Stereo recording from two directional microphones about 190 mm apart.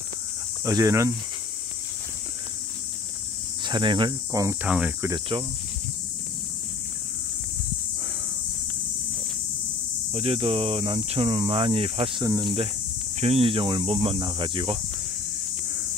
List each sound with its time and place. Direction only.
0.7 s speech: 15° right (ahead or behind)
3.6 s speech: 25° right (ahead or behind)
4.6 s speech: 5° right (ahead or behind)
5.3 s speech: 25° right (ahead or behind)
10.1 s speech: 30° right (ahead or behind)